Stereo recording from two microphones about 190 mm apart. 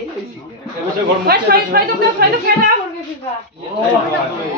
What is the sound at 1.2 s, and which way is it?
Speech, 50° right (ahead or behind).